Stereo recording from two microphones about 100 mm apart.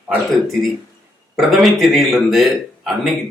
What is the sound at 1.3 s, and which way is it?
A man's voice, centre (ahead or behind).